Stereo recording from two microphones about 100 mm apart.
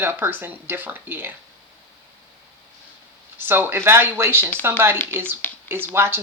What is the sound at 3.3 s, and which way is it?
Speech, 20° right (ahead or behind).